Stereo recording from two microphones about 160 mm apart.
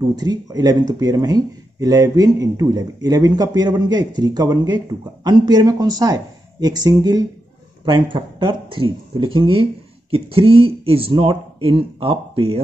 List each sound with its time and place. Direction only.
0.1 s speech: 25° right (ahead or behind)